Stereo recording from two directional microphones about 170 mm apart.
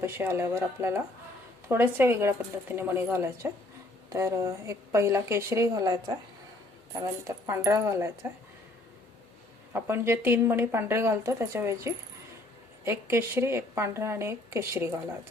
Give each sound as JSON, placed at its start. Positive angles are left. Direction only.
{"t": 0.0, "sound": "speech", "side_deg": -15}
{"t": 9.7, "sound": "speech", "side_deg": -15}